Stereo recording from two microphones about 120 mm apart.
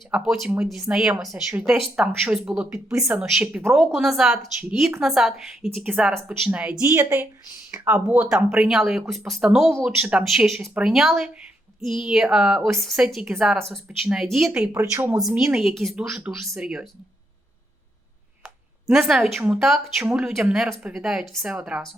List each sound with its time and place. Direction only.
0.1 s speech: 5° right (ahead or behind)
14.7 s speech: 20° right (ahead or behind)
15.2 s speech: 5° right (ahead or behind)
19.0 s speech: centre (ahead or behind)